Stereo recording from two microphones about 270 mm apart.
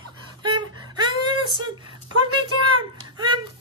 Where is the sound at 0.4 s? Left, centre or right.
Centre.